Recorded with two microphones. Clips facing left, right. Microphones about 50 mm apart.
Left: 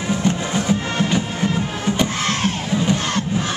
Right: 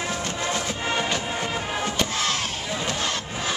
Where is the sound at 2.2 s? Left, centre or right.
Left.